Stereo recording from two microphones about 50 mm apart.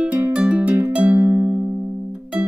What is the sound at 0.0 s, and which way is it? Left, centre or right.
Music, right.